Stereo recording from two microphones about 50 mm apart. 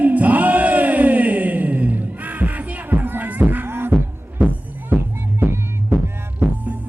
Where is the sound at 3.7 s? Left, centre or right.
Right.